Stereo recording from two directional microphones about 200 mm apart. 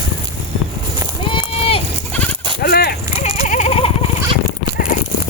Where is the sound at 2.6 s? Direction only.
50° left (ahead or behind).